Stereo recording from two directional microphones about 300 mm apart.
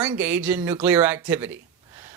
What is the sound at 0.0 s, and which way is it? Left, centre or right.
Speech, centre.